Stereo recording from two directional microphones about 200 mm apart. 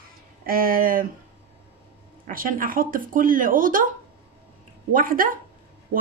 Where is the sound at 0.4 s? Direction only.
45° right (ahead or behind).